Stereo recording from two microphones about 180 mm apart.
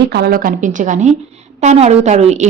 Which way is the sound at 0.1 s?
60° right (ahead or behind).